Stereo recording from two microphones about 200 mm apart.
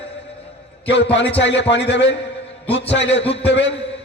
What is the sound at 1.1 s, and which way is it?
A man's voice, 60° left (ahead or behind).